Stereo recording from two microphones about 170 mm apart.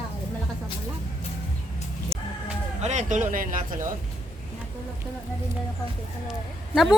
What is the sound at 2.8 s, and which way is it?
Speech, 45° right (ahead or behind).